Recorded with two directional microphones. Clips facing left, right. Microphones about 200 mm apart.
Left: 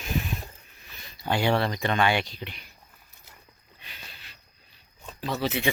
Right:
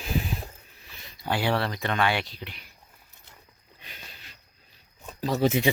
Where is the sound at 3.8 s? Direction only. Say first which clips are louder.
Right 1 dB; 45° right (ahead or behind).